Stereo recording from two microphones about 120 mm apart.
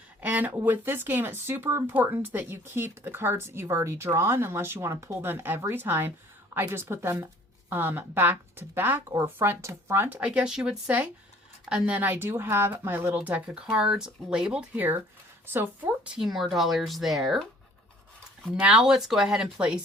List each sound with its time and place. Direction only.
0.2 s a woman's voice: 15° right (ahead or behind)
18.6 s speech: 5° right (ahead or behind)